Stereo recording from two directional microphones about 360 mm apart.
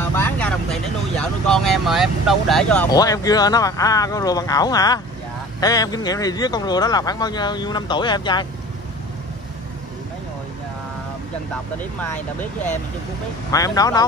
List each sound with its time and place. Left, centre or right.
0.1 s speech: centre
11.5 s speech: centre